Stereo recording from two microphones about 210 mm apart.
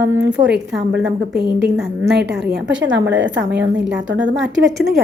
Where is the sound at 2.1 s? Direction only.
55° right (ahead or behind).